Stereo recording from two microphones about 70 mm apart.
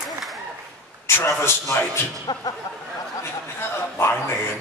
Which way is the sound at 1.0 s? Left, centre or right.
Left.